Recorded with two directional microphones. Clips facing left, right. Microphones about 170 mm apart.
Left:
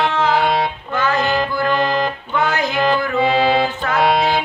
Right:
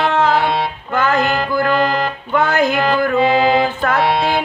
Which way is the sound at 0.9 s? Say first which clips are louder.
Right 3 dB; 55° right (ahead or behind).